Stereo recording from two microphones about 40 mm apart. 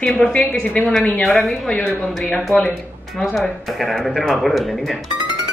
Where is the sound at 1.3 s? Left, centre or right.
Centre.